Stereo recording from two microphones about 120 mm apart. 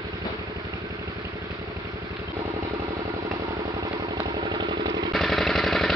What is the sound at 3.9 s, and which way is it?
Vehicle, 40° right (ahead or behind).